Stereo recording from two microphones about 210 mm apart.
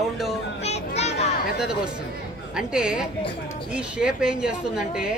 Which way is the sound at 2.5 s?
5° right (ahead or behind).